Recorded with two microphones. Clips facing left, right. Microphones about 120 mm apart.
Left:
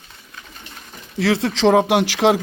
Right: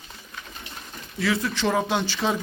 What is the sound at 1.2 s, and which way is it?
Speech, 80° left.